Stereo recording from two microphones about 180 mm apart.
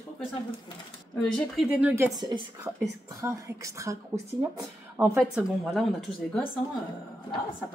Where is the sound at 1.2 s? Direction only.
5° left (ahead or behind).